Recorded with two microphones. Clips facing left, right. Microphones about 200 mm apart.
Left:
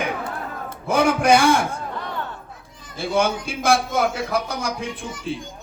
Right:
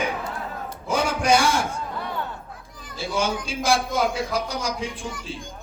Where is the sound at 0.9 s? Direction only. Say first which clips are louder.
Left 4 dB; 55° left (ahead or behind).